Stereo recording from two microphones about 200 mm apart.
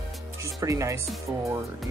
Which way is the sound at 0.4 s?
15° right (ahead or behind).